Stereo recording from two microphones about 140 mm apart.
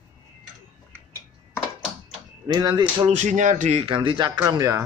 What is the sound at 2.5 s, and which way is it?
Speech, 30° right (ahead or behind).